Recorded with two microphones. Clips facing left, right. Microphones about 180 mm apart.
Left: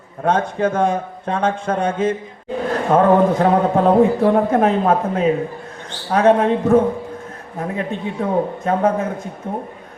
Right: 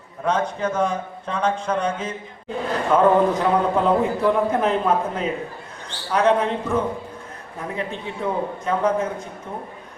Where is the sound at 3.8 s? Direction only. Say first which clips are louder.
Left 6 dB; 50° left (ahead or behind).